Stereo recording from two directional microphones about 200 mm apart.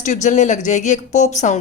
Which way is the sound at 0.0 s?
35° left (ahead or behind).